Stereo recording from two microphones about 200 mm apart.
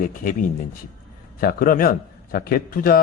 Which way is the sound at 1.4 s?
45° left (ahead or behind).